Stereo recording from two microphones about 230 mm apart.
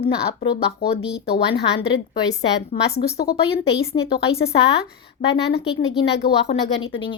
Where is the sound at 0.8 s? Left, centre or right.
Left.